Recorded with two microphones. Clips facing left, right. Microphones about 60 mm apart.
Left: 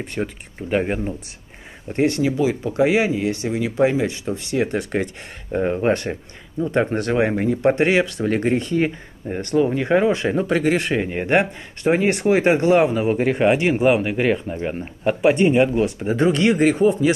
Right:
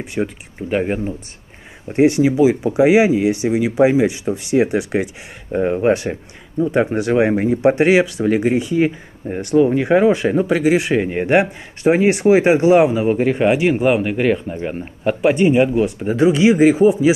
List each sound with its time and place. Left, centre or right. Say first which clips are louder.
0.0 s speech: right 4 dB; centre
1.9 s speech: right 6 dB; centre
12.9 s speech: right 3 dB; centre